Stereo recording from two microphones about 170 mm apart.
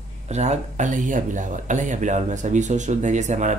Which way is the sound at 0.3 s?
40° right (ahead or behind).